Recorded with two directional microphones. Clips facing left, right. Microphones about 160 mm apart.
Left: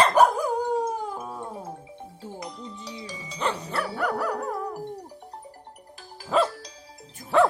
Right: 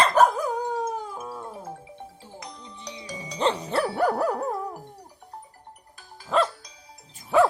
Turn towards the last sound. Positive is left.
turn(degrees=-10)  # may be behind; listen again after turning